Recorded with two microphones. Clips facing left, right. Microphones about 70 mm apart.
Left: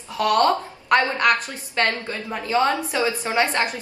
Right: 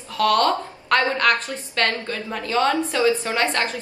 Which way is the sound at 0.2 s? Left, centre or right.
Centre.